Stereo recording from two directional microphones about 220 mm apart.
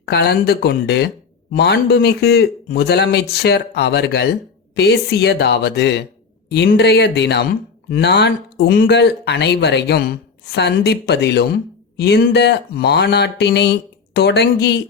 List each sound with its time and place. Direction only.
0.0 s speech: 50° left (ahead or behind)